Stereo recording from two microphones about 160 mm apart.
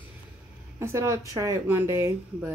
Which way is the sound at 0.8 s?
20° right (ahead or behind).